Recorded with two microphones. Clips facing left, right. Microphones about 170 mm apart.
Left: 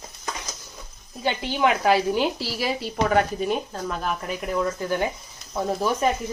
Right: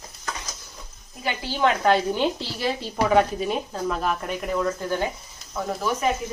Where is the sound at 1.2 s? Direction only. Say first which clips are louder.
Left 1 dB; 25° left (ahead or behind).